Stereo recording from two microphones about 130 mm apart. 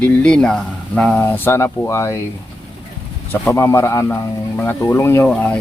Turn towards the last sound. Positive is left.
turn(degrees=5)  # may be behind; listen again after turning